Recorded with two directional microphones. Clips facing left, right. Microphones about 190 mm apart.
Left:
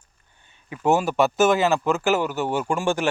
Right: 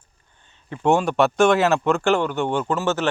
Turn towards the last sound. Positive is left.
turn(degrees=10)  # may be behind; listen again after turning